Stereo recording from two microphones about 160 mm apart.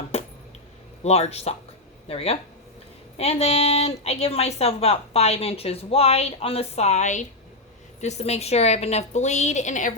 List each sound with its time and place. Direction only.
0.1 s cutlery: 40° left (ahead or behind)
1.0 s a woman's voice: 40° left (ahead or behind)